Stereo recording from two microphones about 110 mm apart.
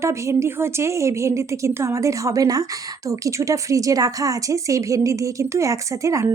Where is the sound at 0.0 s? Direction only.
25° right (ahead or behind).